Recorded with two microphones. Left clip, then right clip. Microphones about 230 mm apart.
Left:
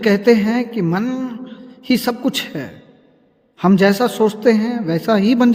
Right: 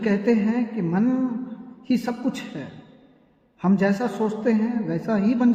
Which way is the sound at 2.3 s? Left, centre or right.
Left.